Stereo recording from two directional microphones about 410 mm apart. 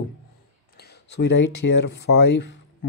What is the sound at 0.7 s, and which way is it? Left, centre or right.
Speech, left.